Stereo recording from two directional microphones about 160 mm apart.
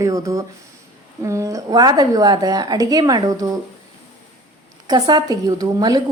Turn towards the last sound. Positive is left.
turn(degrees=-25)  # may be behind; listen again after turning